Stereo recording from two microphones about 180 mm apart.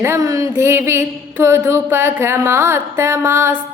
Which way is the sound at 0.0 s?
15° right (ahead or behind).